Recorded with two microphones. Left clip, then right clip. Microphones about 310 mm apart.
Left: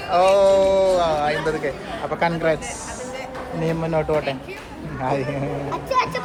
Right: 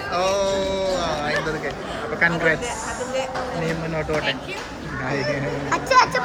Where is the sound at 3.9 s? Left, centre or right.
Centre.